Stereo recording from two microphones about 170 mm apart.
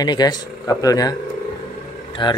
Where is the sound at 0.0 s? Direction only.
25° left (ahead or behind).